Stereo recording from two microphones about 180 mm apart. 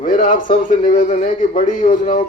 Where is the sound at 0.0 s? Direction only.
50° left (ahead or behind).